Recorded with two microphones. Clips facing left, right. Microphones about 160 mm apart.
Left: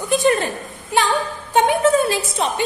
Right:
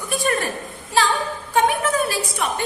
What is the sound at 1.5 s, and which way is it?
A woman's voice, 25° left (ahead or behind).